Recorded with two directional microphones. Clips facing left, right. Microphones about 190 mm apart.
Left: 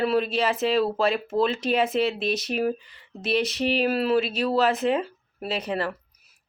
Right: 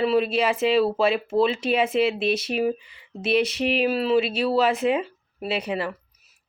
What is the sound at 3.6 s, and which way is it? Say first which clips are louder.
Speech: right 1 dB; 35° left (ahead or behind).